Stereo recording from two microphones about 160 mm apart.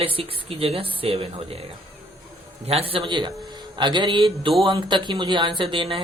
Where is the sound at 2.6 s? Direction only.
40° right (ahead or behind).